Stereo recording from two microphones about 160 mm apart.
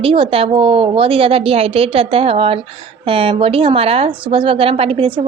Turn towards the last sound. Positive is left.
turn(degrees=-35)  # may be behind; listen again after turning